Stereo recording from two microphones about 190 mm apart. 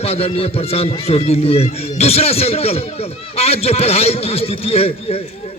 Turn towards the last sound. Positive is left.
turn(degrees=30)  # may be behind; listen again after turning